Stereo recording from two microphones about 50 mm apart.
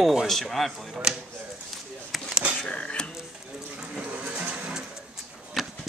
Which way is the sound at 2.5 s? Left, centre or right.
Left.